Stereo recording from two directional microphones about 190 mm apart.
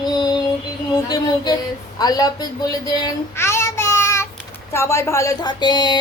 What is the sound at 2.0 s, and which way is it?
A child's voice, 20° left (ahead or behind).